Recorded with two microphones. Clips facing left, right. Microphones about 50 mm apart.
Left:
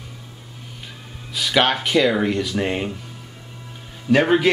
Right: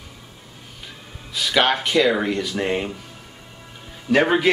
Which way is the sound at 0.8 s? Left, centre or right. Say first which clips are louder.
Left 1 dB; centre.